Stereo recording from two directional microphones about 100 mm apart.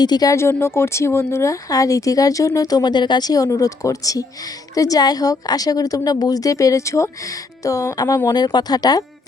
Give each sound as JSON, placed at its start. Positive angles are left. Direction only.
{"t": 0.0, "sound": "speech", "side_deg": 40}
{"t": 0.6, "sound": "speech", "side_deg": 25}